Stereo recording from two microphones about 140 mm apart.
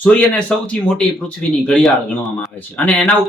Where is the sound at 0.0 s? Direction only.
10° left (ahead or behind).